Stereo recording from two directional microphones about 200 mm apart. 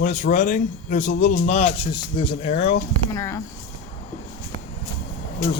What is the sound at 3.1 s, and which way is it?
Speech, 15° left (ahead or behind).